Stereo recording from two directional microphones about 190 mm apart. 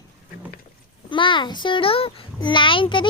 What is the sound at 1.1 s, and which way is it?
A child's voice, 25° left (ahead or behind).